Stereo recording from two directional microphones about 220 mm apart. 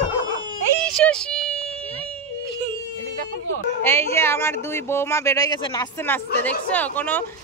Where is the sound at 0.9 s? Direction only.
5° left (ahead or behind).